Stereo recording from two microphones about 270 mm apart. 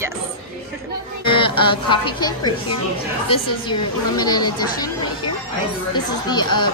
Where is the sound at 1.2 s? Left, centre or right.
Centre.